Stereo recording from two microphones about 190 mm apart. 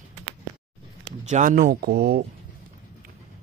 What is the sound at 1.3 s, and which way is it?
Speech, 40° right (ahead or behind).